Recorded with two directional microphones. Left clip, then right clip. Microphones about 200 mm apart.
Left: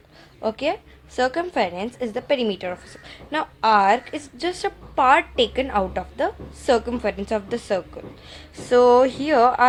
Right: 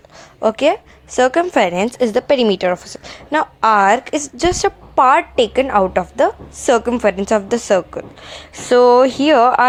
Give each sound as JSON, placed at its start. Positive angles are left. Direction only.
{"t": 0.4, "sound": "a woman's voice", "side_deg": -30}